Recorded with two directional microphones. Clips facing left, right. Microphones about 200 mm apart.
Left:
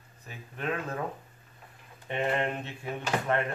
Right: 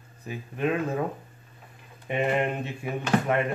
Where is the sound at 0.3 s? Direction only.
10° right (ahead or behind).